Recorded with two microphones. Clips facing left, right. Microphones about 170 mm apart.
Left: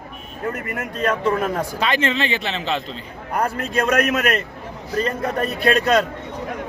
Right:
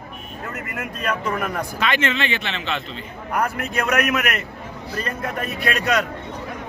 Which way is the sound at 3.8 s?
30° left (ahead or behind).